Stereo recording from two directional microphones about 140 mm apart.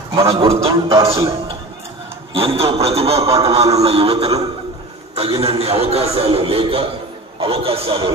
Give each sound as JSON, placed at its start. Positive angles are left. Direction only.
{"t": 0.1, "sound": "a man's voice", "side_deg": -40}
{"t": 0.9, "sound": "a man's voice", "side_deg": -20}
{"t": 2.3, "sound": "a man's voice", "side_deg": -45}